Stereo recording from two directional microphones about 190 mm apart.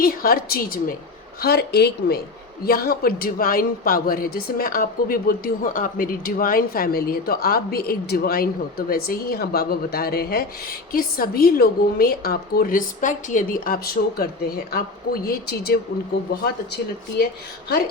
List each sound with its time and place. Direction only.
0.0 s a woman's voice: 50° left (ahead or behind)